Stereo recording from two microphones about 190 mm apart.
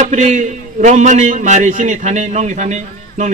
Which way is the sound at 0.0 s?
40° right (ahead or behind).